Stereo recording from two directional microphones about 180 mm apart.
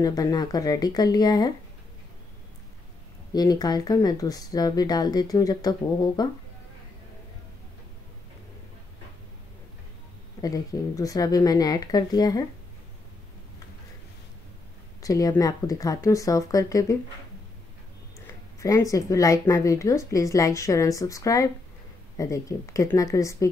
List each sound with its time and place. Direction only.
0.0 s speech: 20° left (ahead or behind)
3.3 s speech: 20° left (ahead or behind)
10.4 s speech: 20° left (ahead or behind)
15.0 s speech: 20° left (ahead or behind)
18.2 s speech: 20° left (ahead or behind)